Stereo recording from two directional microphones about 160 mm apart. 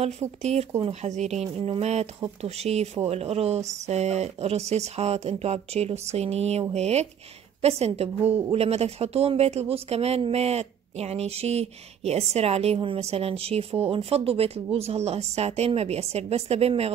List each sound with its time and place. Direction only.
0.0 s speech: 45° right (ahead or behind)